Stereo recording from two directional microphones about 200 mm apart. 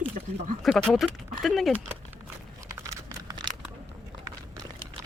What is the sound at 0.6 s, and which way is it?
Speech, 5° left (ahead or behind).